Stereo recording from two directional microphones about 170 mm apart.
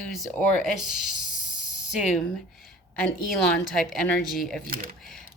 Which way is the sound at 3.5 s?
5° left (ahead or behind).